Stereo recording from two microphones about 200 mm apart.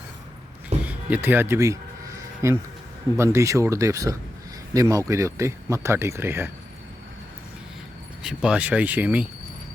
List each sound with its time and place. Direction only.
0.7 s a sound: 35° right (ahead or behind)
1.1 s speech: 10° right (ahead or behind)
8.2 s speech: 5° right (ahead or behind)